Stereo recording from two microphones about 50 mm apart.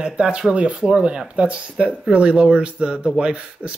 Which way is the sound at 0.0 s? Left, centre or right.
Right.